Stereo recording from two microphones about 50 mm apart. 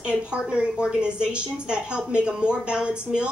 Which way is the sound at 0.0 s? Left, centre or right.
Centre.